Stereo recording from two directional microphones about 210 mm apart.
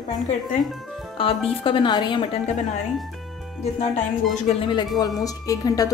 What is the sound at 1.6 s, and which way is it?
Speech, 25° left (ahead or behind).